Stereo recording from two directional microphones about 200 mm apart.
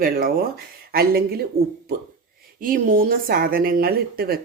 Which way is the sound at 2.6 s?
45° right (ahead or behind).